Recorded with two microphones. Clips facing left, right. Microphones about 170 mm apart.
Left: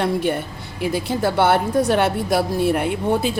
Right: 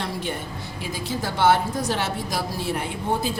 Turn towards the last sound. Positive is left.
turn(degrees=60)  # may be behind; listen again after turning